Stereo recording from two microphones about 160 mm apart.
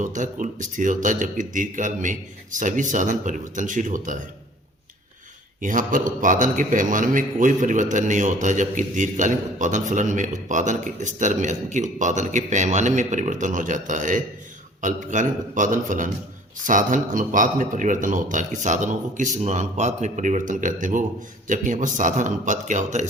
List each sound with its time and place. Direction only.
0.0 s a man's voice: 50° right (ahead or behind)
5.5 s a man's voice: 55° right (ahead or behind)